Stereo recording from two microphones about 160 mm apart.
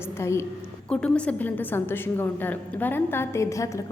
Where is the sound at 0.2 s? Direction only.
15° left (ahead or behind).